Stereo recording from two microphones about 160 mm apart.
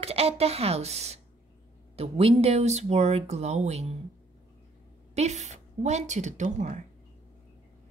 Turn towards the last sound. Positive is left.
turn(degrees=-45)  # may be behind; listen again after turning